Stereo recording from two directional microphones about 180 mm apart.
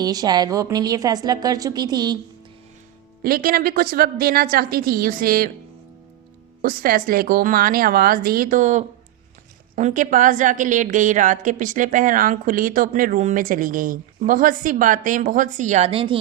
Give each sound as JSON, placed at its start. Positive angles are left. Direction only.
{"t": 0.0, "sound": "a woman's voice", "side_deg": -20}
{"t": 3.2, "sound": "a woman's voice", "side_deg": -55}
{"t": 6.6, "sound": "a woman's voice", "side_deg": -55}